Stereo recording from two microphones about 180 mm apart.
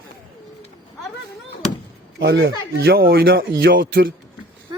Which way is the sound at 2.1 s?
70° right (ahead or behind).